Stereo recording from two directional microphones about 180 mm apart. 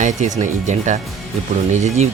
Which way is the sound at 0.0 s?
45° right (ahead or behind).